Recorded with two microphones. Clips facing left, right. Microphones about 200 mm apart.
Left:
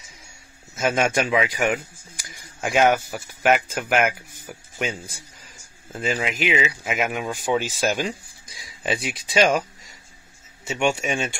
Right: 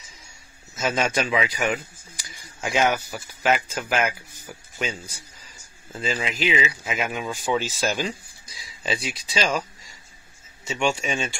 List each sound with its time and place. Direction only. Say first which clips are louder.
0.7 s speech: left 3 dB; 50° left (ahead or behind)
5.9 s speech: left 2 dB; 50° left (ahead or behind)